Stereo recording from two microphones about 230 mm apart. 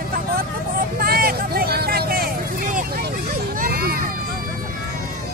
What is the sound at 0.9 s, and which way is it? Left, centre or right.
Vehicle, right.